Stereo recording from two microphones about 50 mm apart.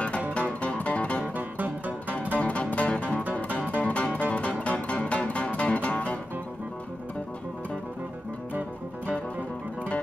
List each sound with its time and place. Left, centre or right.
0.3 s music: left
1.2 s music: right
2.3 s music: left